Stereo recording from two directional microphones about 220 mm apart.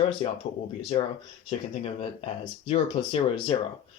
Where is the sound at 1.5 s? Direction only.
25° left (ahead or behind).